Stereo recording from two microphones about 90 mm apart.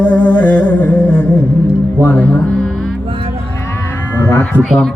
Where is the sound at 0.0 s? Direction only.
20° left (ahead or behind).